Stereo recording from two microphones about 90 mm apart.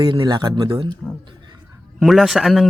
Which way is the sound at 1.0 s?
15° left (ahead or behind).